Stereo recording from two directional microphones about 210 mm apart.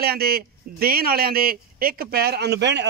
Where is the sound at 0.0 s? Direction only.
45° right (ahead or behind).